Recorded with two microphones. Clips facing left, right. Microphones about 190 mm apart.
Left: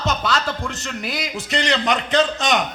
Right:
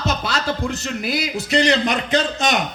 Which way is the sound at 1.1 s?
35° right (ahead or behind).